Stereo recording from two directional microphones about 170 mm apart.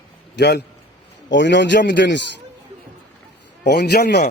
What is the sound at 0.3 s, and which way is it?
A man's voice, 80° left.